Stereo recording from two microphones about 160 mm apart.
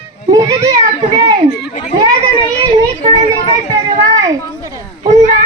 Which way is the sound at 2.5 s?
25° right (ahead or behind).